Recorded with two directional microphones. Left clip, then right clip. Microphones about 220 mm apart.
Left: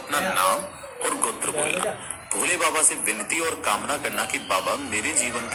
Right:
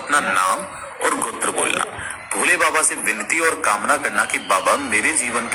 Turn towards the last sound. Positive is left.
turn(degrees=-15)  # may be behind; listen again after turning